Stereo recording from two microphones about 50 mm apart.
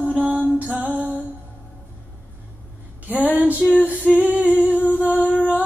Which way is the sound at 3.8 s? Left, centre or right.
Right.